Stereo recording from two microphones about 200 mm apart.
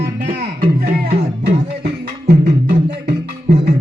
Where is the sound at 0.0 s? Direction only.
50° right (ahead or behind).